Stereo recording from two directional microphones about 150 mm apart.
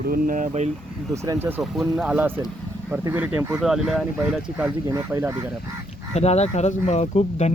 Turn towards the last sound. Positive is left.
turn(degrees=45)  # may be behind; listen again after turning